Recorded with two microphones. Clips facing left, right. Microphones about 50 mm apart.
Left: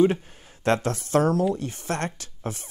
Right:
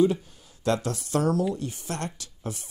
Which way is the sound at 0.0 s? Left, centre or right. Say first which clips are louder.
Left 2 dB; left.